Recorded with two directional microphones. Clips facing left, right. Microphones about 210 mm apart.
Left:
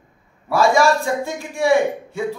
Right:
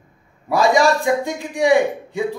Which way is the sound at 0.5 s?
15° right (ahead or behind).